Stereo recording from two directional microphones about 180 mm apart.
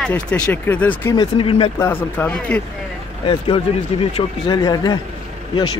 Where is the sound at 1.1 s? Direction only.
25° left (ahead or behind).